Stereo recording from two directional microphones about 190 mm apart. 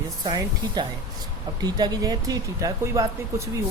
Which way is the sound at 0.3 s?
25° right (ahead or behind).